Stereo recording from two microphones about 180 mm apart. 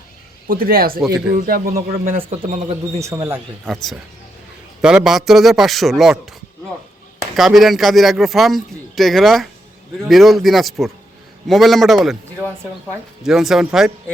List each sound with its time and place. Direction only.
0.4 s speech: 55° right (ahead or behind)
3.0 s speech: 15° right (ahead or behind)
4.8 s speech: 5° right (ahead or behind)
7.3 s speech: centre (ahead or behind)
13.2 s speech: centre (ahead or behind)